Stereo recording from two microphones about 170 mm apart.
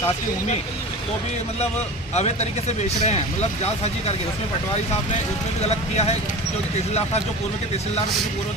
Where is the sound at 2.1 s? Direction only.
40° left (ahead or behind).